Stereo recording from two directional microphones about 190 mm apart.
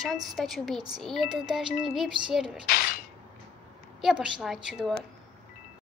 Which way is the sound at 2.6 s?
50° left (ahead or behind).